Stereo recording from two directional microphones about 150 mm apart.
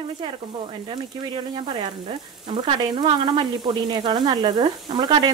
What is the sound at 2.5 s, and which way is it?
Sizzle, 35° right (ahead or behind).